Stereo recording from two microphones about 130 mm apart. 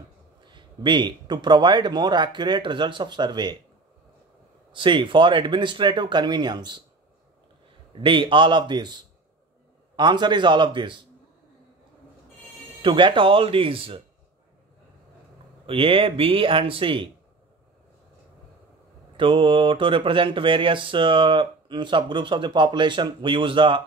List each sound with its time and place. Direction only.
0.4 s speech: 35° right (ahead or behind)
4.7 s speech: 40° right (ahead or behind)
8.0 s speech: 40° right (ahead or behind)
9.9 s speech: 35° right (ahead or behind)
12.8 s speech: 40° right (ahead or behind)
15.6 s speech: 45° right (ahead or behind)
19.1 s speech: 40° right (ahead or behind)